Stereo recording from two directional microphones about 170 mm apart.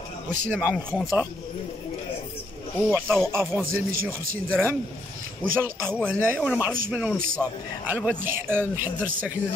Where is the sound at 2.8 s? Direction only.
10° right (ahead or behind).